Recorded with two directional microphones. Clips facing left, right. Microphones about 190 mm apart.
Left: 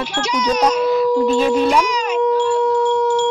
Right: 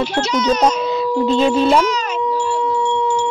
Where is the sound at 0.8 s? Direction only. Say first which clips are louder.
Left 3 dB; 25° right (ahead or behind).